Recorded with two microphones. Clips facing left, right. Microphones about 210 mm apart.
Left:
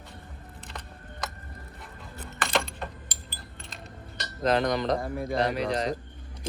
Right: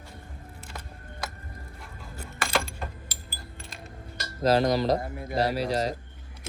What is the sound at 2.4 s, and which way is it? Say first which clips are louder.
Keys jangling: left 1 dB; centre (ahead or behind).